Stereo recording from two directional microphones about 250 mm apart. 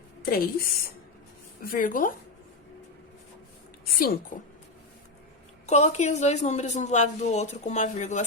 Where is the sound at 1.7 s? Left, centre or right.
Left.